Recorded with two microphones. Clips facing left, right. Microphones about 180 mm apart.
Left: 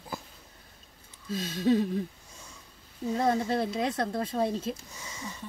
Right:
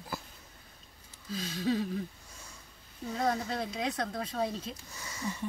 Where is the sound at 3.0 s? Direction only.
25° left (ahead or behind).